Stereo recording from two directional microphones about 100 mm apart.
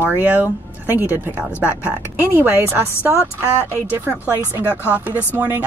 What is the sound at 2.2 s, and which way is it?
Speech, 20° right (ahead or behind).